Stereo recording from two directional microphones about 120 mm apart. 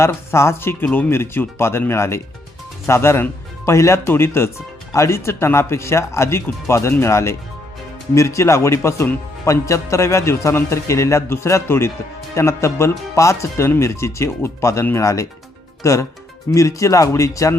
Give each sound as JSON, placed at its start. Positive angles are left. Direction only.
{"t": 0.0, "sound": "speech", "side_deg": 20}